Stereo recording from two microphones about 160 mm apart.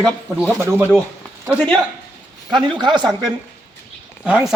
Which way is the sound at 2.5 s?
30° right (ahead or behind).